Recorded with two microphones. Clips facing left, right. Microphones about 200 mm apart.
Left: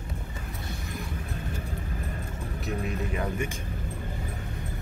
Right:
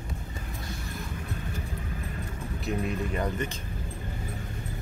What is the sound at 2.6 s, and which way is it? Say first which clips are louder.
Speech: right 2 dB; 5° left (ahead or behind).